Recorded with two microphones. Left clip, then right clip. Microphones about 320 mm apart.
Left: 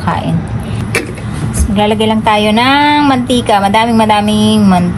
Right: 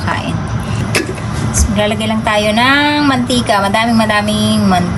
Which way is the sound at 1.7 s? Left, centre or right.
Centre.